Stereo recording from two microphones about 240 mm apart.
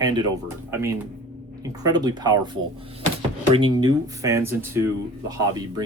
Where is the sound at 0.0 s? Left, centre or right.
Centre.